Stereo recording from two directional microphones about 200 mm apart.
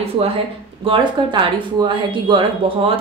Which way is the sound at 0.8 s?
25° right (ahead or behind).